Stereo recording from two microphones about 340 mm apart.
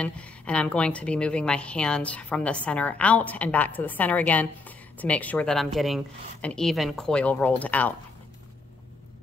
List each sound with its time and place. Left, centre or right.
0.0 s a woman's voice: centre